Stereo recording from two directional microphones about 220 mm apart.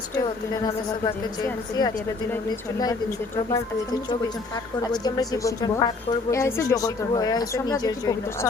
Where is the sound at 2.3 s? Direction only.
15° left (ahead or behind).